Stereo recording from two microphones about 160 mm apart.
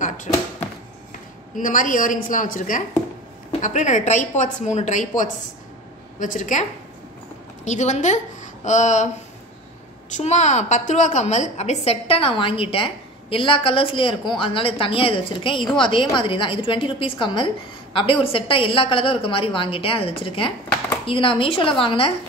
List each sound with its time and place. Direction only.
1.6 s a woman's voice: 55° left (ahead or behind)
7.6 s a woman's voice: 45° left (ahead or behind)